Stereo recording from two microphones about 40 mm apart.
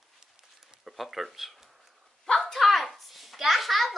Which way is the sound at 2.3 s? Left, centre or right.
Centre.